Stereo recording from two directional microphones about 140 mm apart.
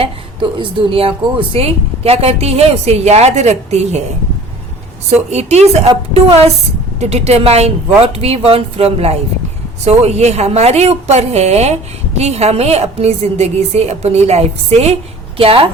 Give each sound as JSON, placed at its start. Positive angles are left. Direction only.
{"t": 0.0, "sound": "a woman's voice", "side_deg": -40}
{"t": 5.0, "sound": "a woman's voice", "side_deg": -50}